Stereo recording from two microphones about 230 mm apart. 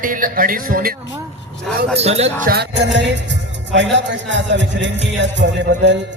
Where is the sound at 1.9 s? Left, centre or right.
Right.